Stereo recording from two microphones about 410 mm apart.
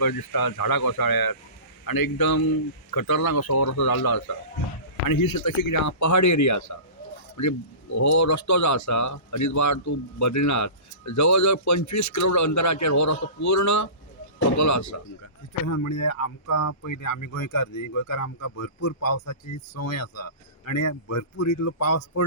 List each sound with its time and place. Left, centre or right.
0.0 s speech: left
3.5 s speech: left
3.8 s speech: left
5.7 s speech: left